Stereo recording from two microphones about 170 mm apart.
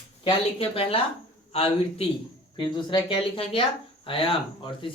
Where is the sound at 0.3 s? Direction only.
35° left (ahead or behind).